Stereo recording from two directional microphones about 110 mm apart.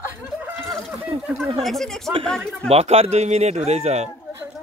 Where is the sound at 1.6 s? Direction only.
5° left (ahead or behind).